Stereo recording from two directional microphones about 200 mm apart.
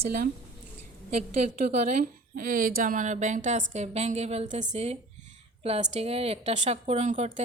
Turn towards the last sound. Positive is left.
turn(degrees=-35)  # may be behind; listen again after turning